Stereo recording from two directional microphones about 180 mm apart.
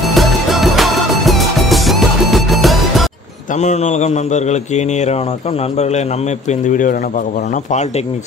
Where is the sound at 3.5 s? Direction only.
40° left (ahead or behind).